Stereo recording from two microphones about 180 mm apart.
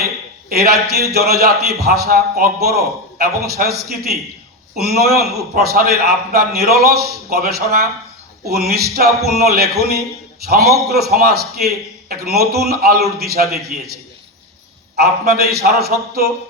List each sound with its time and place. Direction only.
0.5 s a man's voice: 60° right (ahead or behind)
14.9 s a man's voice: 60° right (ahead or behind)